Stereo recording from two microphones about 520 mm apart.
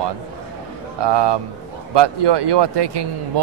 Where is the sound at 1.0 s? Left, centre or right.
Right.